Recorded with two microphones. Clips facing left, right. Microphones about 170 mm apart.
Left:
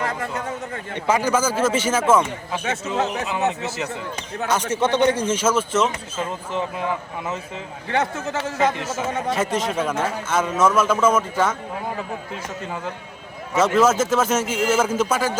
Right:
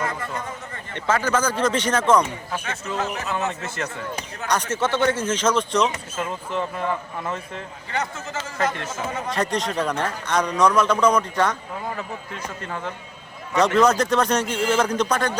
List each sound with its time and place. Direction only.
0.9 s speech: 10° left (ahead or behind)
3.3 s speech: 15° left (ahead or behind)
5.3 s a man's voice: 5° left (ahead or behind)
7.9 s speech: 80° left
9.3 s a man's voice: 5° left (ahead or behind)
12.6 s a man's voice: 10° left (ahead or behind)